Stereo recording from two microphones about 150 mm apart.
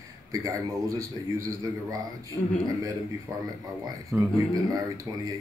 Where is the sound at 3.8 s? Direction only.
20° right (ahead or behind).